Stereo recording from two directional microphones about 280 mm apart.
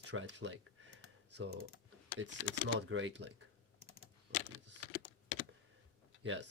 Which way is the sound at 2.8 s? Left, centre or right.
Right.